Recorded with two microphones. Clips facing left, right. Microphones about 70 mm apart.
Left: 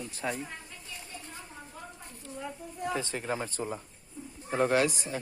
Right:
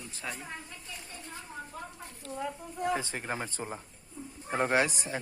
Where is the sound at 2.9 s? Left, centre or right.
Right.